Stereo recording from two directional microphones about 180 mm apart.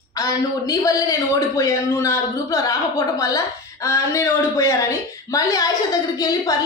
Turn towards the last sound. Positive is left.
turn(degrees=20)  # may be behind; listen again after turning